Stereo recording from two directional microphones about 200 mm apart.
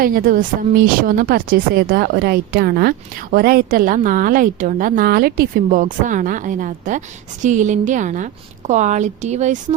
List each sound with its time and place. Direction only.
0.0 s a woman's voice: 45° right (ahead or behind)